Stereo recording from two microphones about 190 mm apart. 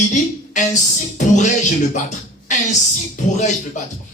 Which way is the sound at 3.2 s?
40° left (ahead or behind).